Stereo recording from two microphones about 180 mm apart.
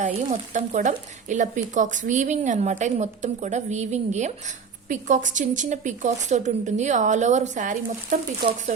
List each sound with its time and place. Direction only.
0.0 s speech: 45° right (ahead or behind)